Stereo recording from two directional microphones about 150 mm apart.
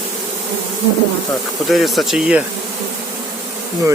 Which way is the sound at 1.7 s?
Centre (ahead or behind).